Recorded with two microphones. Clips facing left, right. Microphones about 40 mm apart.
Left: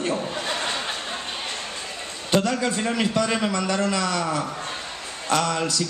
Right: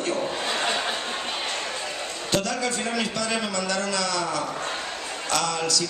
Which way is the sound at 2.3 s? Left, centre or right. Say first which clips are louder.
Left 4 dB; centre.